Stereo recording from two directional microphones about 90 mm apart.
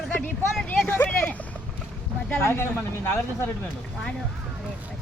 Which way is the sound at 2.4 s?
25° left (ahead or behind).